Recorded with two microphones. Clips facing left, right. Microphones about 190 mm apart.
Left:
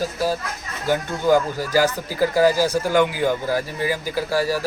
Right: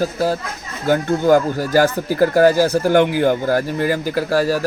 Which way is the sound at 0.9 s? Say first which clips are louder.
Right 4 dB; 50° right (ahead or behind).